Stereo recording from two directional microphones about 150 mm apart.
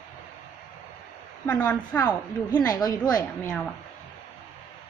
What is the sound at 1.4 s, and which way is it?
Speech, 10° left (ahead or behind).